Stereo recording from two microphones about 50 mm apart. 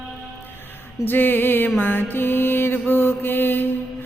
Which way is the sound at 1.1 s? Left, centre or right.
Left.